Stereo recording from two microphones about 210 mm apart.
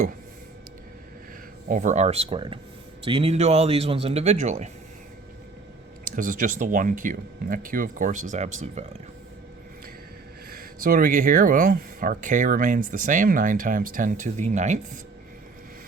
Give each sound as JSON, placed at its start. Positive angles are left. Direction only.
{"t": 1.7, "sound": "speech", "side_deg": -35}
{"t": 6.1, "sound": "speech", "side_deg": -40}
{"t": 10.5, "sound": "speech", "side_deg": -45}